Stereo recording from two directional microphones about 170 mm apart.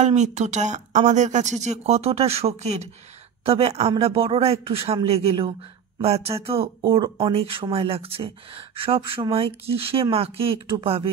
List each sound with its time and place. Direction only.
0.0 s speech: 45° right (ahead or behind)